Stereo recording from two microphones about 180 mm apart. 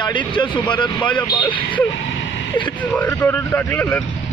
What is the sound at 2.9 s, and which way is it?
Speech, 10° left (ahead or behind).